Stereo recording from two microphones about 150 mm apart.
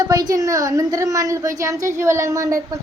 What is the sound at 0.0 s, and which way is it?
A woman's voice, 25° right (ahead or behind).